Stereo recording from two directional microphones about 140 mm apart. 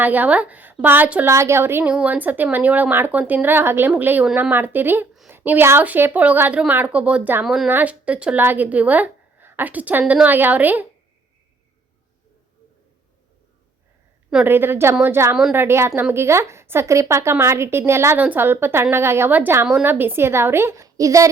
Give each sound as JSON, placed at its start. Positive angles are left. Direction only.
{"t": 0.0, "sound": "a woman's voice", "side_deg": -10}
{"t": 14.3, "sound": "a woman's voice", "side_deg": -5}
{"t": 14.5, "sound": "a woman's voice", "side_deg": -15}